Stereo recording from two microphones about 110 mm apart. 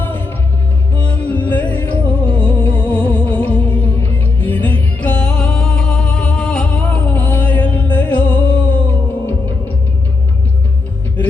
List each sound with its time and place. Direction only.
0.0 s music: 20° left (ahead or behind)